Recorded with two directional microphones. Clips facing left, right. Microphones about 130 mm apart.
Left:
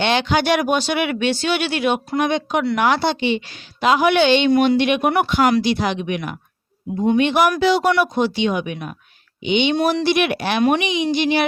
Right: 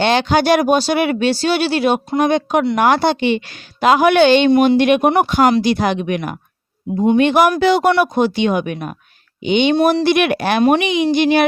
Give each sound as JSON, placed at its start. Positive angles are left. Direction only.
{"t": 0.0, "sound": "a woman's voice", "side_deg": -40}